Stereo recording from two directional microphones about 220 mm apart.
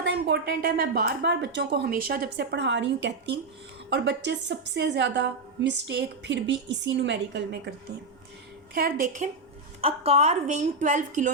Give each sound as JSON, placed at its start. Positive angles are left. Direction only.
{"t": 0.0, "sound": "a woman's voice", "side_deg": -55}
{"t": 8.7, "sound": "a woman's voice", "side_deg": -40}
{"t": 9.8, "sound": "a woman's voice", "side_deg": -25}